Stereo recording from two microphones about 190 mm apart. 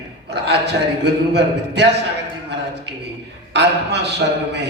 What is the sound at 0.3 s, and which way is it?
A man's voice, 60° right (ahead or behind).